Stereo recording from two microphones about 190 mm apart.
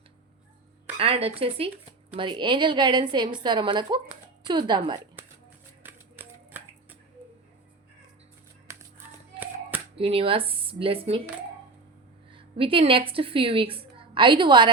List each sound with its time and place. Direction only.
0.9 s a sound: 30° right (ahead or behind)
1.4 s a woman's voice: 30° right (ahead or behind)
5.8 s a sound: 10° right (ahead or behind)
8.7 s music: 15° right (ahead or behind)
9.9 s a woman's voice: 30° right (ahead or behind)
12.3 s a woman's voice: 30° right (ahead or behind)